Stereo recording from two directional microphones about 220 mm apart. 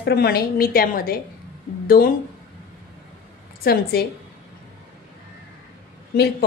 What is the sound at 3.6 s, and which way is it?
Speech, 45° left (ahead or behind).